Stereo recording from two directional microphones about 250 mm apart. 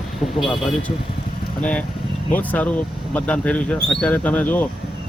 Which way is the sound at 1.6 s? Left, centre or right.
Centre.